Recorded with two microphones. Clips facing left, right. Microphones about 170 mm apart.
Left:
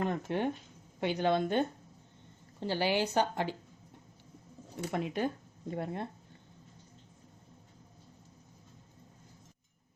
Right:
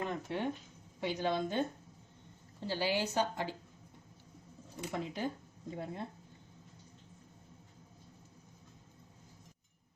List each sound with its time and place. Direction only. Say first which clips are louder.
0.0 s a sound: left 5 dB; 50° left (ahead or behind)
0.9 s a woman's voice: left 5 dB; 65° left (ahead or behind)
4.9 s a woman's voice: left 5 dB; 65° left (ahead or behind)